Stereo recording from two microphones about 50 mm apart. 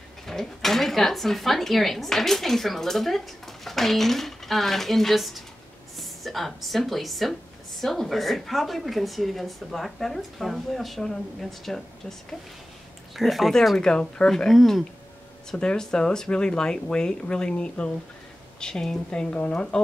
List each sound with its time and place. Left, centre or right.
0.3 s speech: centre
13.7 s speech: centre
14.5 s speech: centre
15.5 s speech: centre